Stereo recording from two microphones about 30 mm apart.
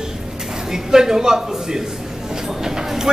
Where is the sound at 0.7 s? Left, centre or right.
Centre.